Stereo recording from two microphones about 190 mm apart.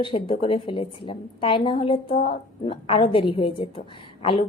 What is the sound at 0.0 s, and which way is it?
A woman's voice, 30° left (ahead or behind).